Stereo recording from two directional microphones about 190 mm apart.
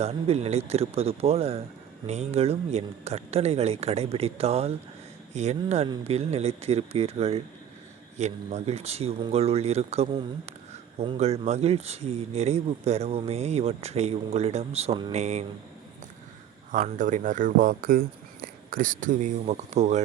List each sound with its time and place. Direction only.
0.0 s speech: 35° right (ahead or behind)
16.7 s speech: 40° right (ahead or behind)